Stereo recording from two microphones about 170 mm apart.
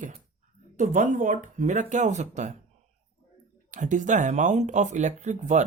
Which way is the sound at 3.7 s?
50° right (ahead or behind).